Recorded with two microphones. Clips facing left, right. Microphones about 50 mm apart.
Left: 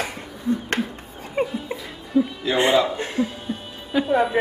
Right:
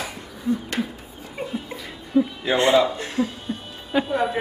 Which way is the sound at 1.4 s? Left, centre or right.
Left.